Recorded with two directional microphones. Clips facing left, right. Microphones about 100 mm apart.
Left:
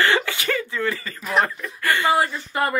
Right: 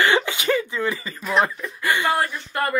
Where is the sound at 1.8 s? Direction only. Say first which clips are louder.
Left 1 dB; 15° right (ahead or behind).